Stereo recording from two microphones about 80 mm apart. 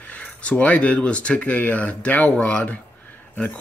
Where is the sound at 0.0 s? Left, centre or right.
Centre.